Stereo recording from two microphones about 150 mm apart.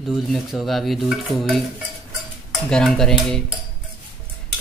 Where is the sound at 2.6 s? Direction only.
5° left (ahead or behind).